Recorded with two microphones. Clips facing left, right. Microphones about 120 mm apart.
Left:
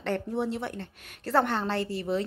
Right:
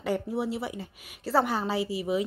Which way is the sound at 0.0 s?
5° right (ahead or behind).